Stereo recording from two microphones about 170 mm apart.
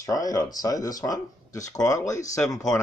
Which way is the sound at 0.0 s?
20° left (ahead or behind).